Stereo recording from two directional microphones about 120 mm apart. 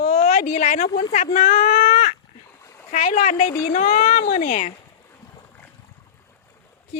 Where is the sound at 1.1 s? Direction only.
75° left (ahead or behind).